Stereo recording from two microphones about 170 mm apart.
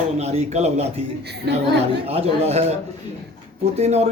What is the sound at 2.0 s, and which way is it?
Speech, 35° right (ahead or behind).